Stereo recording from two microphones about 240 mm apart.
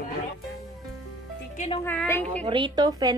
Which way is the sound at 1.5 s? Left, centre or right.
Left.